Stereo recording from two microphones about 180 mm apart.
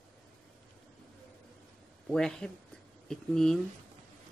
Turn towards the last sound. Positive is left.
turn(degrees=5)  # may be behind; listen again after turning